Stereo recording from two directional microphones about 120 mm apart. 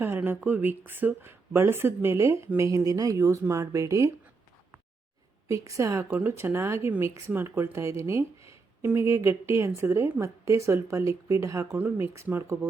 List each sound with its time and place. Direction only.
0.0 s speech: 15° right (ahead or behind)
5.5 s speech: 25° right (ahead or behind)